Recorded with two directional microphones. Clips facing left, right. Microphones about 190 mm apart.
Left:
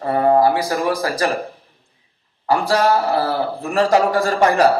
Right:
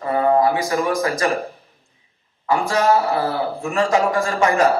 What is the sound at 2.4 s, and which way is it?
A man's voice, 35° left (ahead or behind).